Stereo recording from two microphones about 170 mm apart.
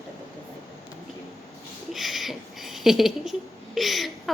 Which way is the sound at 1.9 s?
Centre (ahead or behind).